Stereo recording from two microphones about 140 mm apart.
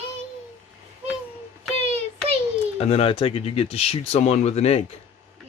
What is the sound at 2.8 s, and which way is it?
Speech, 45° left (ahead or behind).